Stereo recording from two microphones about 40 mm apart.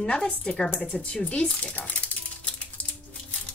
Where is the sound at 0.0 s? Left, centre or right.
Centre.